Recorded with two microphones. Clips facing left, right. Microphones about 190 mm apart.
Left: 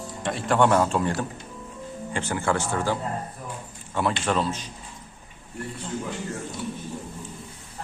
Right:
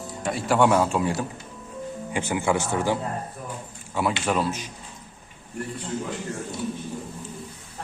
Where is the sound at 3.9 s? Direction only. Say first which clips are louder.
Even; 5° right (ahead or behind).